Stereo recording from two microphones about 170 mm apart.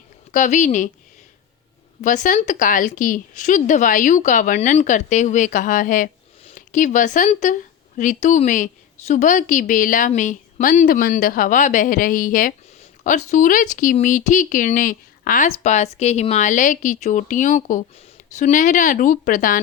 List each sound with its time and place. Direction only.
0.3 s a woman's voice: 45° left (ahead or behind)
2.0 s a woman's voice: 45° left (ahead or behind)
15.4 s a woman's voice: 40° left (ahead or behind)